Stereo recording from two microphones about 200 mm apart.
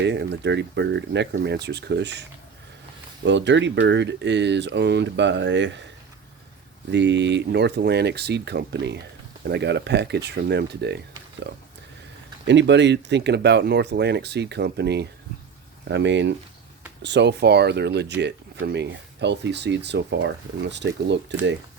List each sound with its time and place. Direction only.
0.0 s speech: 60° right (ahead or behind)
3.2 s speech: 65° right (ahead or behind)
6.9 s speech: 60° right (ahead or behind)